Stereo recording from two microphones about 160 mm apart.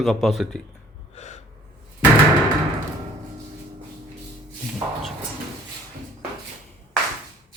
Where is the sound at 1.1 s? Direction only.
45° left (ahead or behind).